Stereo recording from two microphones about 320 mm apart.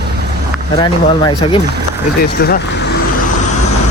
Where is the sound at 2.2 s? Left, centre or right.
Left.